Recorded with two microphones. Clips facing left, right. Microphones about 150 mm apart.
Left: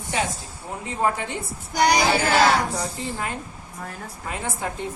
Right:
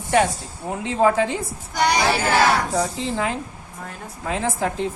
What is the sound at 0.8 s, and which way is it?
Speech, 90° right.